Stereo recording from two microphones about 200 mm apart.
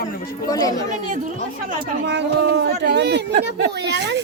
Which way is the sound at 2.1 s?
60° right (ahead or behind).